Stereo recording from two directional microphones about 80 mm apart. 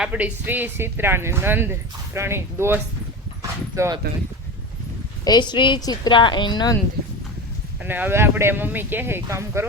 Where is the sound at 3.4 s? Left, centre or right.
Right.